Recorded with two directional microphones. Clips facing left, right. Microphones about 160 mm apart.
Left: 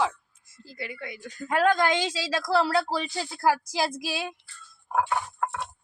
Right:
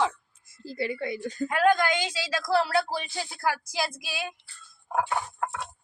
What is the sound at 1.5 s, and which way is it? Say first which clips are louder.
A woman's voice: left 1 dB; 30° left (ahead or behind).